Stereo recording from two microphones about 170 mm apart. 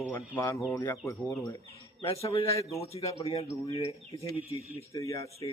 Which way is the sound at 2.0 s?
35° left (ahead or behind).